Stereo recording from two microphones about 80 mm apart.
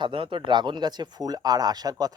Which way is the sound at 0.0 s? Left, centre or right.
Right.